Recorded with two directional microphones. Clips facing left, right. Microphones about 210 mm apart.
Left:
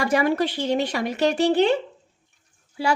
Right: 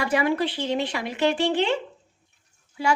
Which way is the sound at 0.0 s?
40° left (ahead or behind).